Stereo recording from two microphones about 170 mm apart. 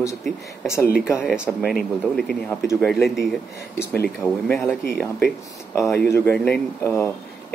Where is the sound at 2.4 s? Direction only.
10° left (ahead or behind).